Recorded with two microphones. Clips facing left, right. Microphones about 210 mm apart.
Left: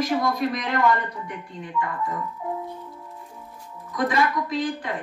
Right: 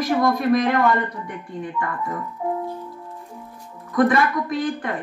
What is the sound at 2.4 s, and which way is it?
Music, 40° right (ahead or behind).